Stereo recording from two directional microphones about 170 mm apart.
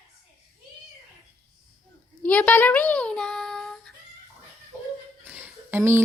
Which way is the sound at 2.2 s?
10° left (ahead or behind).